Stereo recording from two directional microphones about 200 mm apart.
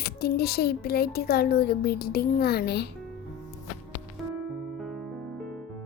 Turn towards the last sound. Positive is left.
turn(degrees=0)  # may be behind; listen again after turning